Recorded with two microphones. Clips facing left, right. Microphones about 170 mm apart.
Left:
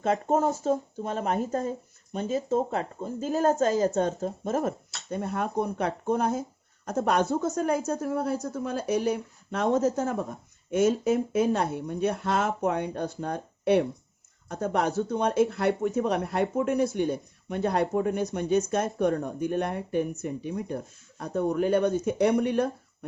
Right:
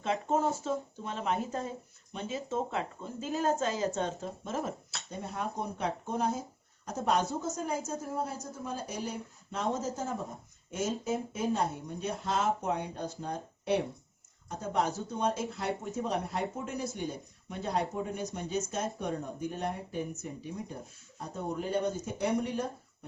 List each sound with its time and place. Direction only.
0.0 s speech: 45° left (ahead or behind)
5.0 s a woman's voice: 60° left (ahead or behind)